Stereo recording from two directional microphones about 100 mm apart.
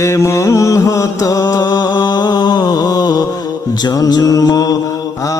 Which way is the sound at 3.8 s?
40° left (ahead or behind).